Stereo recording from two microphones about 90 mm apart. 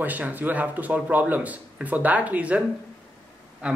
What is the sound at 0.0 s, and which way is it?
A man's voice, 20° right (ahead or behind).